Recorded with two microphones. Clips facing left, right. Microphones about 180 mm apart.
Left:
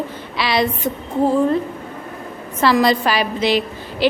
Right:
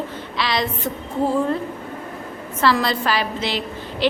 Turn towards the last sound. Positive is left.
turn(degrees=10)  # may be behind; listen again after turning